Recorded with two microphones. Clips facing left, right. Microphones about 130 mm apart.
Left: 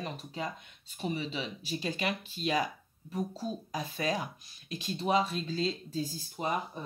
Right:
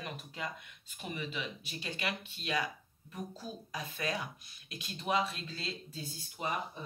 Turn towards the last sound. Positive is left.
turn(degrees=40)  # may be behind; listen again after turning